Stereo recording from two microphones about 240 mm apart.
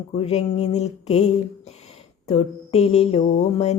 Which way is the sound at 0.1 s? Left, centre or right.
Left.